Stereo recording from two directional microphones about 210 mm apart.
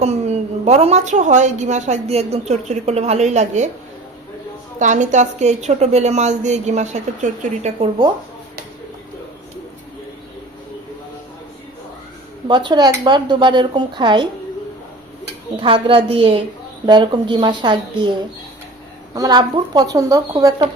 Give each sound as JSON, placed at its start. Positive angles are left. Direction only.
{"t": 0.0, "sound": "a woman's voice", "side_deg": -30}
{"t": 4.8, "sound": "a woman's voice", "side_deg": -35}
{"t": 12.5, "sound": "speech", "side_deg": -20}
{"t": 15.6, "sound": "speech", "side_deg": -25}
{"t": 19.1, "sound": "speech", "side_deg": -20}